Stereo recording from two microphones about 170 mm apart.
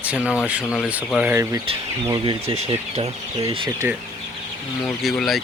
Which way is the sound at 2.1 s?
30° right (ahead or behind).